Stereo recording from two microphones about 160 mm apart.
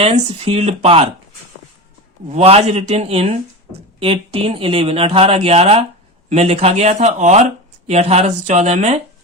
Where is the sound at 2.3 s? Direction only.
40° right (ahead or behind).